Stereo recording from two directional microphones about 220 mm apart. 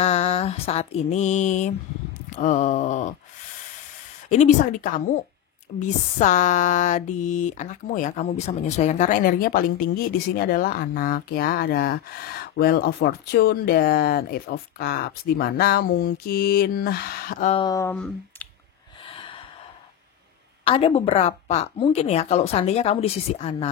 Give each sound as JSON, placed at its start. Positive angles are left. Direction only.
{"t": 0.0, "sound": "mantra", "side_deg": 30}
{"t": 2.3, "sound": "wail", "side_deg": 35}
{"t": 4.3, "sound": "wail", "side_deg": 30}
{"t": 5.8, "sound": "a sound", "side_deg": 35}
{"t": 17.6, "sound": "a sound", "side_deg": 15}
{"t": 17.9, "sound": "speech", "side_deg": 5}
{"t": 19.0, "sound": "gasp", "side_deg": 25}
{"t": 20.6, "sound": "speech", "side_deg": 25}